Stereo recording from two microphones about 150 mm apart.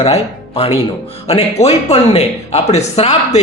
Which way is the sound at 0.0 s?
40° left (ahead or behind).